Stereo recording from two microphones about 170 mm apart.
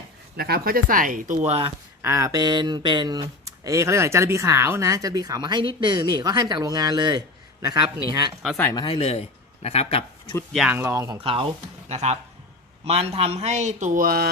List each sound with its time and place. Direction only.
0.3 s a man's voice: 65° right (ahead or behind); by 1.7 s 40° right (ahead or behind)
2.0 s speech: 15° right (ahead or behind)
8.7 s a man's voice: 25° left (ahead or behind)
10.5 s speech: centre (ahead or behind)
10.8 s speech: 15° right (ahead or behind)
11.2 s a man's voice: 30° right (ahead or behind); by 14.3 s 60° right (ahead or behind)